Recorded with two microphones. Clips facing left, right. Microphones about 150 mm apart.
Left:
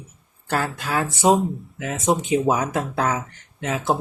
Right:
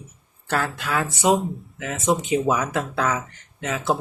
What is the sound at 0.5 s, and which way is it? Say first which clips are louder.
Speech: left 1 dB; 30° left (ahead or behind).